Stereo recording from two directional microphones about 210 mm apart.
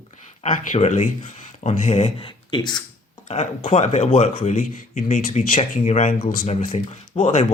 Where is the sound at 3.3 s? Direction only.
30° left (ahead or behind).